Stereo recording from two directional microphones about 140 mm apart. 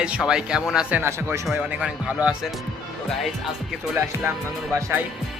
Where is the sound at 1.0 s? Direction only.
20° right (ahead or behind).